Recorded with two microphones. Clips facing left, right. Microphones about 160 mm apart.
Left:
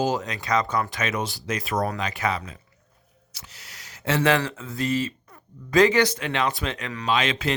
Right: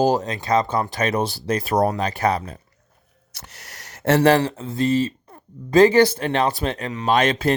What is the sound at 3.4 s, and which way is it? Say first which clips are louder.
Speech: right 5 dB; 55° right (ahead or behind).